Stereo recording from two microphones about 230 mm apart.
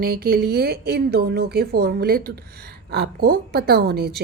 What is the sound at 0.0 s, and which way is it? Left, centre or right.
Speech, right.